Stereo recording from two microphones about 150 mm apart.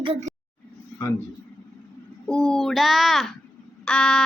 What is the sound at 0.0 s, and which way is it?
Speech, 40° right (ahead or behind).